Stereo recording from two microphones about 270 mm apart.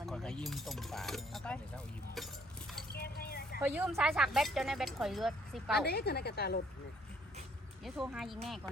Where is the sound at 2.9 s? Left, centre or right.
Left.